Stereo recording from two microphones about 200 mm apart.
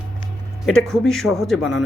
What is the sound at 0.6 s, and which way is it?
Speech, centre (ahead or behind).